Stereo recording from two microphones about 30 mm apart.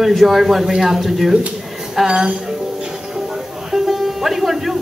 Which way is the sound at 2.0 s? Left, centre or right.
Right.